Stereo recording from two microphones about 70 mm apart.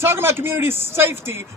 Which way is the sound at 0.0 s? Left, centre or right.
Right.